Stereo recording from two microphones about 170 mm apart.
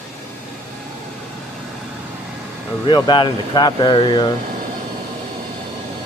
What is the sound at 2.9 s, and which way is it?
Speech, 25° left (ahead or behind).